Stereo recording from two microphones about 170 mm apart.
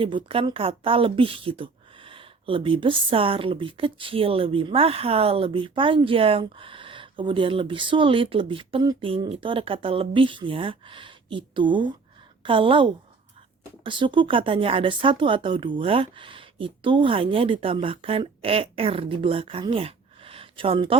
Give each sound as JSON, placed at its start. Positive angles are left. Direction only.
{"t": 0.0, "sound": "a woman's voice", "side_deg": -30}